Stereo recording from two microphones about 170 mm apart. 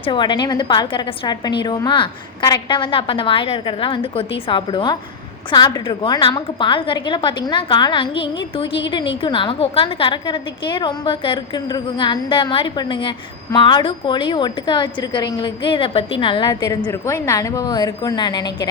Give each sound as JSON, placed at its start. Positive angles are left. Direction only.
{"t": 0.0, "sound": "a woman's voice", "side_deg": 30}